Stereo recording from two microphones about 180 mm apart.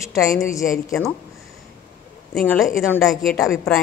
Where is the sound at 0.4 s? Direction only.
15° left (ahead or behind).